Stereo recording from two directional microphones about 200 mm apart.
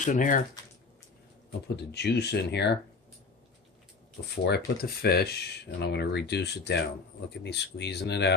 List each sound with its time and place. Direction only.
0.0 s speech: 40° left (ahead or behind)
1.8 s speech: 55° left (ahead or behind)
4.5 s speech: 50° left (ahead or behind)